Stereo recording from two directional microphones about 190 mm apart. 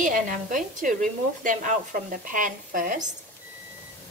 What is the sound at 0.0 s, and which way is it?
Speech, 45° right (ahead or behind).